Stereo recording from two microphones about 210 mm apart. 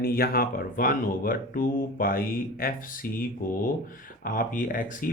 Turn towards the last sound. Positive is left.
turn(degrees=40)  # may be behind; listen again after turning